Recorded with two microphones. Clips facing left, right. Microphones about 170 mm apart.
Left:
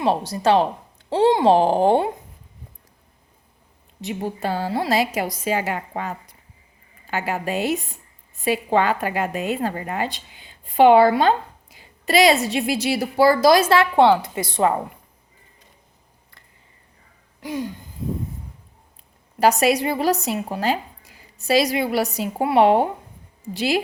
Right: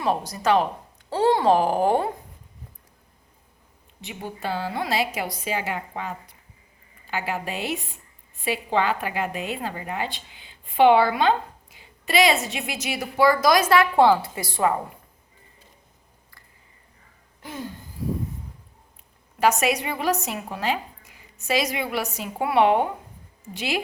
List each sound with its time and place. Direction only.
0.0 s a woman's voice: 30° left (ahead or behind)
1.1 s speech: 15° left (ahead or behind)
1.5 s a woman's voice: 30° left (ahead or behind)
4.0 s a woman's voice: 40° left (ahead or behind); by 14.8 s 25° left (ahead or behind)
17.4 s a sound: 15° left (ahead or behind)
19.4 s a woman's voice: 35° left (ahead or behind)